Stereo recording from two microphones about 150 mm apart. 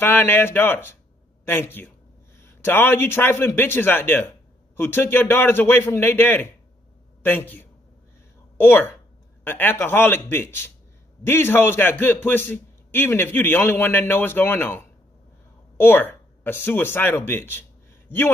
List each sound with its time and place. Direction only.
0.0 s a man's voice: 15° left (ahead or behind)